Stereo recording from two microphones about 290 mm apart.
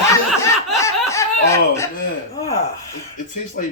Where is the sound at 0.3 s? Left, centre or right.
Centre.